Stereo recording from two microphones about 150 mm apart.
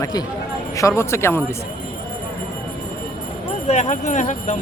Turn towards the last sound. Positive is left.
turn(degrees=50)  # may be behind; listen again after turning